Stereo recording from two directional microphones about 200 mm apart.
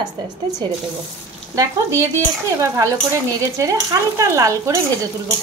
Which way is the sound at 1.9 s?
15° right (ahead or behind).